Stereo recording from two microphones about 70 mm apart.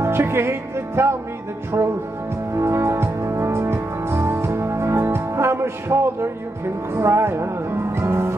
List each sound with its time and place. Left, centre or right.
0.0 s music: right
2.5 s music: right